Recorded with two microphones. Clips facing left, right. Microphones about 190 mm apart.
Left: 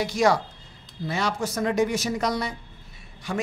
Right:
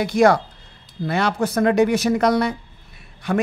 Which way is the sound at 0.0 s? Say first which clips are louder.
Right 6 dB; 55° right (ahead or behind).